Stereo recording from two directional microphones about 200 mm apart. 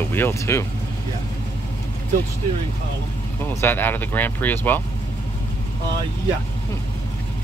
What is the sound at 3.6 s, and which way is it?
Speech, 10° left (ahead or behind).